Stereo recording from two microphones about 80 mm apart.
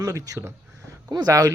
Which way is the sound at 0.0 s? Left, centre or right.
Right.